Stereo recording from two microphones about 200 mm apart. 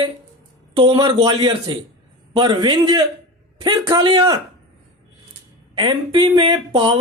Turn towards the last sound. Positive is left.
turn(degrees=-25)  # may be behind; listen again after turning